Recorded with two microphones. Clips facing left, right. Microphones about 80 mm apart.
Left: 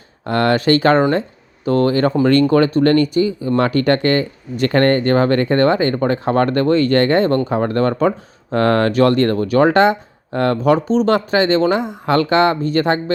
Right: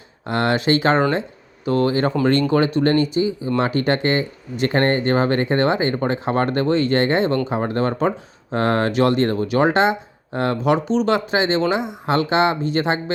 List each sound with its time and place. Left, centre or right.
0.3 s speech: left
2.8 s speech: left